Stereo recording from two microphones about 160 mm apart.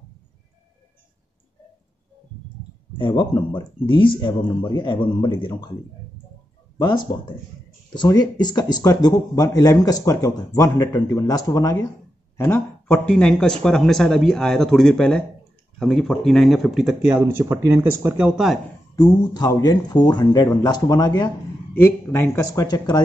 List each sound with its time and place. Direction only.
3.0 s speech: 30° left (ahead or behind)
6.8 s speech: 25° left (ahead or behind)
12.9 s speech: 5° left (ahead or behind)
18.9 s speech: 25° left (ahead or behind)
21.7 s speech: 15° left (ahead or behind)